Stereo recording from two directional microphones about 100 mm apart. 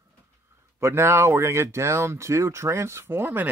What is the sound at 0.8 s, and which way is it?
Speech, 25° right (ahead or behind).